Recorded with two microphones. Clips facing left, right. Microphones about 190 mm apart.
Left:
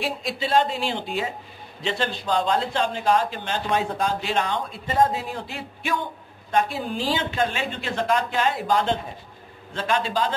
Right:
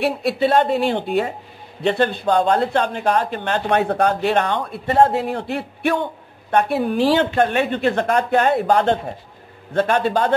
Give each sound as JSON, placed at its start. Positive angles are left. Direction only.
{"t": 0.0, "sound": "speech", "side_deg": -60}